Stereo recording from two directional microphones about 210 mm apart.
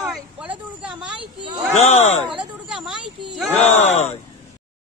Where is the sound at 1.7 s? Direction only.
30° left (ahead or behind).